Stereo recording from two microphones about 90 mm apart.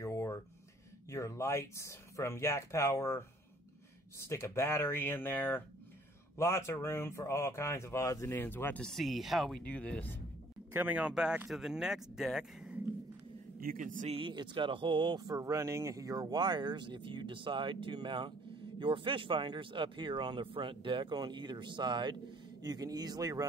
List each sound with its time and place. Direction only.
0.0 s a sound: 35° left (ahead or behind)
1.1 s speech: 35° left (ahead or behind)
8.8 s speech: centre (ahead or behind)
9.6 s speech: 15° left (ahead or behind)
10.7 s speech: 20° right (ahead or behind)
14.3 s speech: 55° right (ahead or behind)
15.3 s speech: 35° right (ahead or behind); by 22.1 s 60° right (ahead or behind)
22.6 s speech: 45° right (ahead or behind)